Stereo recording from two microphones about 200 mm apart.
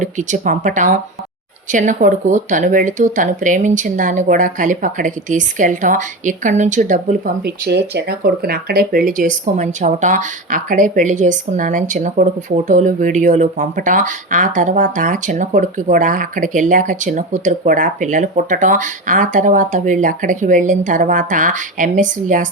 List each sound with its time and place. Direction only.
0.0 s speech: 40° right (ahead or behind)
7.4 s speech: 55° right (ahead or behind); by 22.4 s 40° right (ahead or behind)